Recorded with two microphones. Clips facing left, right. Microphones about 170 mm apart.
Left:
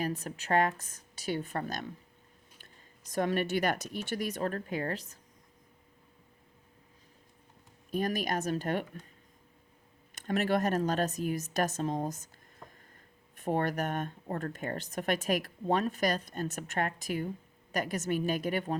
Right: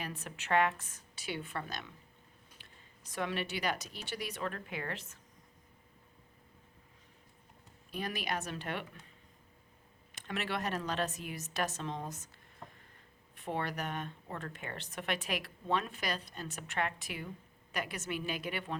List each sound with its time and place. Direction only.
0.0 s a woman's voice: 40° left (ahead or behind)
3.1 s speech: 45° left (ahead or behind)
7.9 s speech: 45° left (ahead or behind)
10.2 s a woman's voice: 45° left (ahead or behind)
13.3 s speech: 45° left (ahead or behind)